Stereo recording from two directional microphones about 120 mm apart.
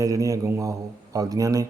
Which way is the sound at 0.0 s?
30° right (ahead or behind).